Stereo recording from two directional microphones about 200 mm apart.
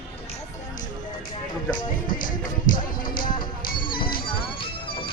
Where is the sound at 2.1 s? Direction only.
45° left (ahead or behind).